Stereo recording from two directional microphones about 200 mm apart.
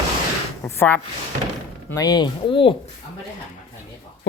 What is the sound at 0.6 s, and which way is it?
Speech, 10° left (ahead or behind).